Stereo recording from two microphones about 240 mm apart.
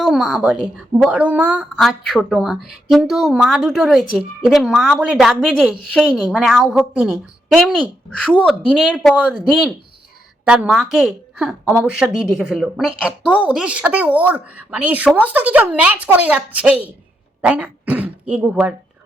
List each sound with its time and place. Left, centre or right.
0.0 s a woman's voice: centre